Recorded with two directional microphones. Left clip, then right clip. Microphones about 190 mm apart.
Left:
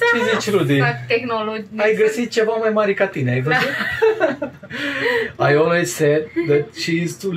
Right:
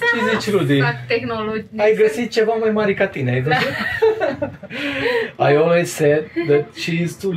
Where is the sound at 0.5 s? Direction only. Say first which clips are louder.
Even; 5° right (ahead or behind).